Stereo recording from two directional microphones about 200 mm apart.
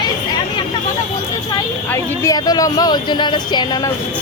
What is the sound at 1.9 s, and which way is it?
Speech, 15° left (ahead or behind).